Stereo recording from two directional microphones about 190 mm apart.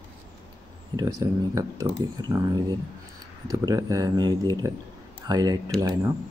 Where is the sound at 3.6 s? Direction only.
20° right (ahead or behind).